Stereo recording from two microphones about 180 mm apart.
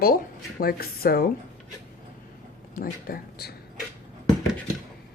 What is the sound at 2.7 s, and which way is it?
Speech, 55° left (ahead or behind).